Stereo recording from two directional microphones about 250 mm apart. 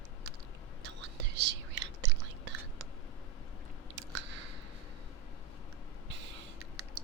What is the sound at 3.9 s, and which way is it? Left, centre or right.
Chewing, right.